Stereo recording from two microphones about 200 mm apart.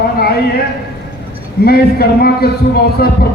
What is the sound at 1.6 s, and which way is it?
Music, 50° left (ahead or behind).